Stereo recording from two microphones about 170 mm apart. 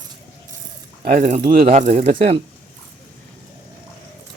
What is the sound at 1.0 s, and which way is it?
Speech, 45° right (ahead or behind).